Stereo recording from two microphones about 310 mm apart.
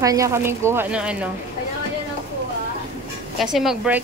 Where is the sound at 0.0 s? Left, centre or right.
Centre.